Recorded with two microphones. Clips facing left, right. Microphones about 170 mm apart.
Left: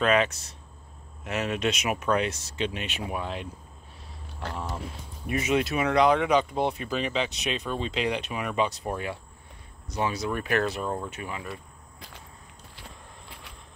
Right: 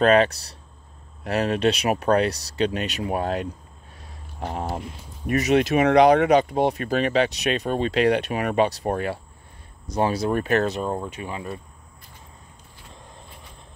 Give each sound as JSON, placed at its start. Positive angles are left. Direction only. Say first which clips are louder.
{"t": 0.0, "sound": "speech", "louder": "right 6 dB", "side_deg": -35}
{"t": 4.6, "sound": "speech", "louder": "right 6 dB", "side_deg": -50}
{"t": 5.4, "sound": "speech", "louder": "right 7 dB", "side_deg": -80}
{"t": 10.1, "sound": "speech", "louder": "right 6 dB", "side_deg": -30}
{"t": 10.7, "sound": "speech", "louder": "right 4 dB", "side_deg": -20}